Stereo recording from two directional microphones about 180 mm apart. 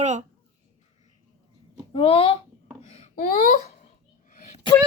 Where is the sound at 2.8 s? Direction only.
40° left (ahead or behind).